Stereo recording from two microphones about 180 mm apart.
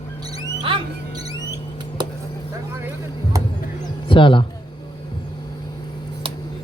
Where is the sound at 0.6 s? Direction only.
25° right (ahead or behind).